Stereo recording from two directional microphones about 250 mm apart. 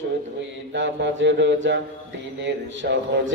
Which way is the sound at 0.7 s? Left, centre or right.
Right.